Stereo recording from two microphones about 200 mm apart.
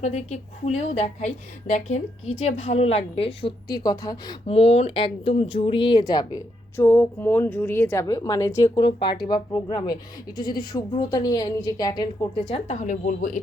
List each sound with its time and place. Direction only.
0.0 s a woman's voice: 35° left (ahead or behind)